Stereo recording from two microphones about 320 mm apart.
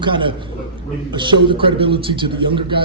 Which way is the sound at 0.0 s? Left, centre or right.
Centre.